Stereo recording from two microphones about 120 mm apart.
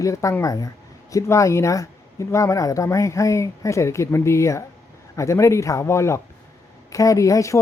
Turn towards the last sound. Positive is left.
turn(degrees=25)  # may be behind; listen again after turning